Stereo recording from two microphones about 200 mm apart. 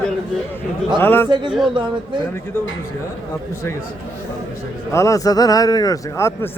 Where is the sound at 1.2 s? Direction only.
25° right (ahead or behind).